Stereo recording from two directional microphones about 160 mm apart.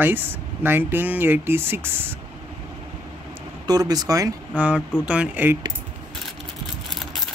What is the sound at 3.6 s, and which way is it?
Speech, 25° right (ahead or behind).